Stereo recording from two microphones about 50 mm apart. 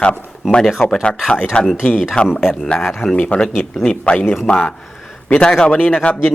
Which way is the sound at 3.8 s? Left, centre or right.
Left.